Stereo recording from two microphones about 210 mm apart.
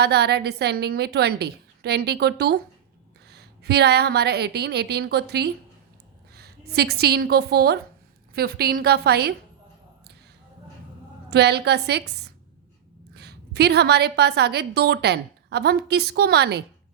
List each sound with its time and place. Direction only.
0.0 s a woman's voice: 50° right (ahead or behind)
11.3 s a woman's voice: 50° right (ahead or behind)